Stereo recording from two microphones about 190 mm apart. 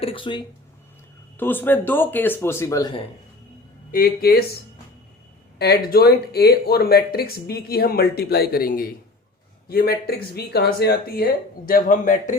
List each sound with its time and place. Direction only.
0.0 s speech: 30° left (ahead or behind)
1.4 s speech: 10° left (ahead or behind)
3.9 s speech: 50° left (ahead or behind)
5.5 s speech: 55° left (ahead or behind)